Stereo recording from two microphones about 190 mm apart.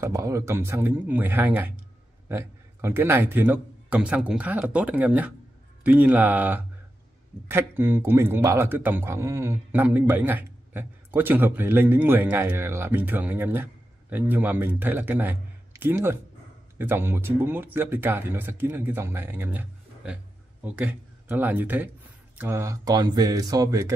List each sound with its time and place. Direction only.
0.0 s a man's voice: 15° right (ahead or behind)